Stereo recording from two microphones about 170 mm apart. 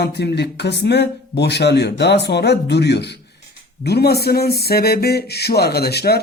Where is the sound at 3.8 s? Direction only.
70° left (ahead or behind).